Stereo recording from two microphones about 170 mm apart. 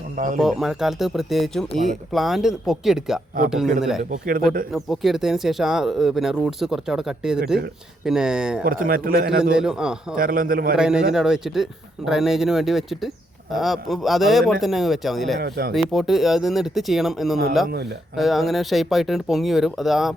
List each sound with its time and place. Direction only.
0.3 s speech: centre (ahead or behind)
4.1 s a man's voice: 55° right (ahead or behind)
4.7 s speech: centre (ahead or behind)
8.6 s a man's voice: 60° right (ahead or behind)
9.4 s speech: 5° right (ahead or behind)
10.2 s a man's voice: 55° right (ahead or behind)
10.8 s speech: 5° right (ahead or behind)
15.4 s speech: 65° right (ahead or behind)
15.7 s speech: centre (ahead or behind)